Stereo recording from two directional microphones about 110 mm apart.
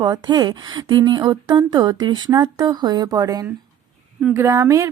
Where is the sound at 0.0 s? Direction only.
40° right (ahead or behind).